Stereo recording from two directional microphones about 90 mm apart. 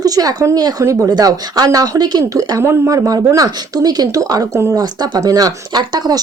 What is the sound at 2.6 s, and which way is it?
Speech, 30° right (ahead or behind).